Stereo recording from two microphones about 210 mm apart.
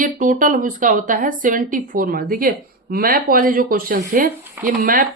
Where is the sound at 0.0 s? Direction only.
40° right (ahead or behind).